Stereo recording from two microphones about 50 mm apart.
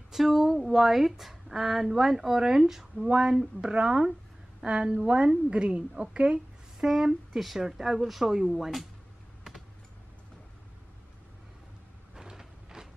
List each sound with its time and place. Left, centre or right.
0.1 s a woman's voice: centre
6.9 s a woman's voice: centre
12.2 s a sound: centre